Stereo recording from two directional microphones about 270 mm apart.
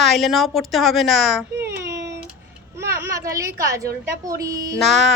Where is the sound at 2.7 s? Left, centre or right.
Centre.